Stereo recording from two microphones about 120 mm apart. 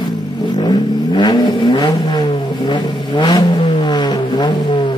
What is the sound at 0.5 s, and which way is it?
Vehicle, 40° left (ahead or behind).